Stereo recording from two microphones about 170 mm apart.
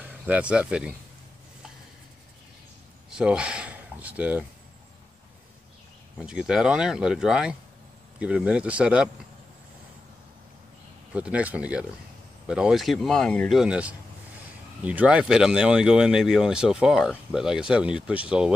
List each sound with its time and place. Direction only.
0.0 s speech: 10° right (ahead or behind)
3.1 s speech: 5° right (ahead or behind)
6.1 s speech: 5° right (ahead or behind)
11.1 s speech: 10° right (ahead or behind)